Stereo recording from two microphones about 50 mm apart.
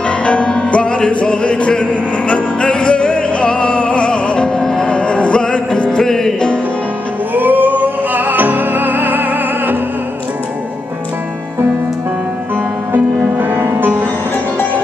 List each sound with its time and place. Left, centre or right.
0.2 s music: left
5.9 s music: centre
7.3 s music: right
13.4 s music: right